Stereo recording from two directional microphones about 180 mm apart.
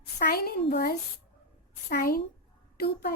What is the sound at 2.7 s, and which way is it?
Speech, 60° left (ahead or behind).